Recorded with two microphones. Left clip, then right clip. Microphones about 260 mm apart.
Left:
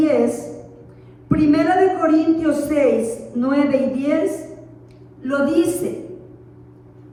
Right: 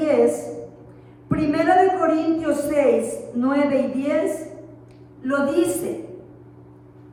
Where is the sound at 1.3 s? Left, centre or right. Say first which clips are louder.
Left 2 dB; right.